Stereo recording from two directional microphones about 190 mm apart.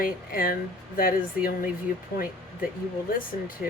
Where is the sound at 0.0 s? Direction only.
50° left (ahead or behind).